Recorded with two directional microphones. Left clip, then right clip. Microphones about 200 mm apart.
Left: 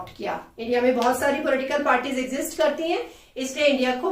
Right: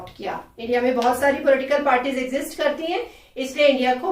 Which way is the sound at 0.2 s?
15° left (ahead or behind).